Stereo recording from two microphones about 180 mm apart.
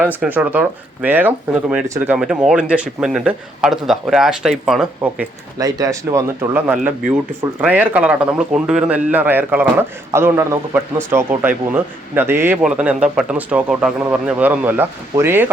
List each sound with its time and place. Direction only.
0.0 s a man's voice: 10° right (ahead or behind)
5.5 s a man's voice: 20° right (ahead or behind)